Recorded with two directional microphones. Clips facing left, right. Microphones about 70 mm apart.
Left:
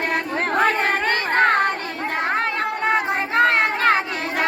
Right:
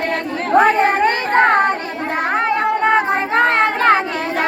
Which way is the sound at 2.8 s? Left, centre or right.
Right.